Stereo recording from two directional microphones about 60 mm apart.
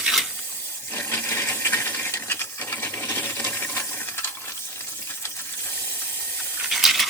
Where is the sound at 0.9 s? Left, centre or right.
Left.